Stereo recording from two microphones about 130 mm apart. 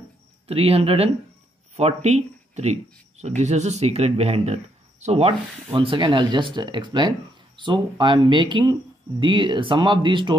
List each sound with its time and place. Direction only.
0.5 s speech: 50° right (ahead or behind)
5.7 s speech: 40° right (ahead or behind)